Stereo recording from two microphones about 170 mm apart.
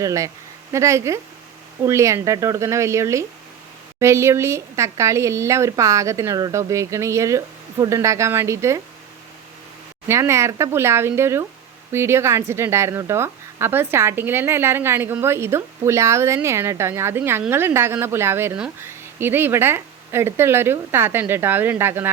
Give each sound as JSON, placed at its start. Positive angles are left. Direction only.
{"t": 0.0, "sound": "a woman's voice", "side_deg": -20}
{"t": 10.1, "sound": "a woman's voice", "side_deg": -15}